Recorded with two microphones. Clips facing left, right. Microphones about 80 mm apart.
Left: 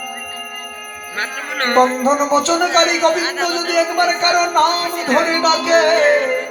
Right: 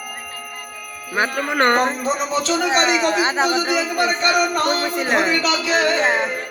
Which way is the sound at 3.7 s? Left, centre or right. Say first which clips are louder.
Left 4 dB; left.